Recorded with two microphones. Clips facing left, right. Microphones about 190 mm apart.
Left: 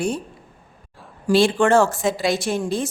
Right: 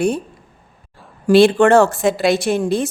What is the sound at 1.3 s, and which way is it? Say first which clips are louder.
A woman's voice: right 6 dB; 65° right (ahead or behind).